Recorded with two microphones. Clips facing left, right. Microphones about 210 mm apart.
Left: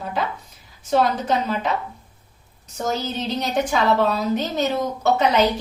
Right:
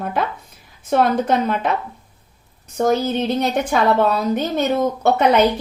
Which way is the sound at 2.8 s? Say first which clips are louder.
Right 8 dB; 55° right (ahead or behind).